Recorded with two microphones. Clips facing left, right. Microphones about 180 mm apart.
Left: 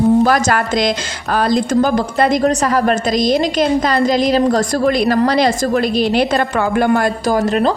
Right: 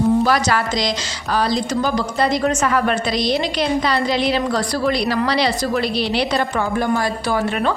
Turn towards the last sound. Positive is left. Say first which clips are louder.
# left 5 dB
turn(degrees=35)  # may be behind; listen again after turning